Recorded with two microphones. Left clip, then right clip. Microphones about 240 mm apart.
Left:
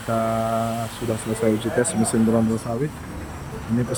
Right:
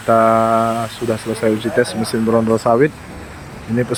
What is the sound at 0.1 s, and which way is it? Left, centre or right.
Speech, centre.